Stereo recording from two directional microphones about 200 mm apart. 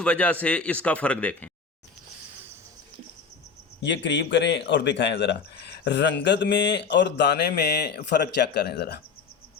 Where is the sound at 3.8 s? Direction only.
65° left (ahead or behind).